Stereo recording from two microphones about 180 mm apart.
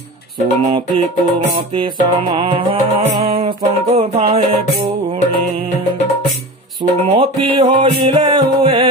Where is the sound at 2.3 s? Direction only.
30° right (ahead or behind).